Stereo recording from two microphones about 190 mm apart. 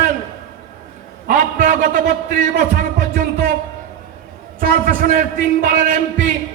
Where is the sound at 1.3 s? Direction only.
45° right (ahead or behind).